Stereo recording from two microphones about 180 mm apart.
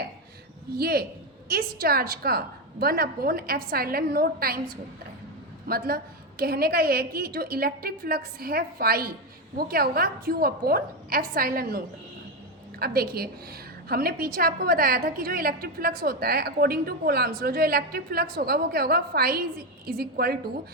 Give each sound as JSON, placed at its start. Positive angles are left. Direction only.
{"t": 0.8, "sound": "a woman's voice", "side_deg": -60}
{"t": 5.6, "sound": "a woman's voice", "side_deg": -55}
{"t": 12.8, "sound": "a woman's voice", "side_deg": -55}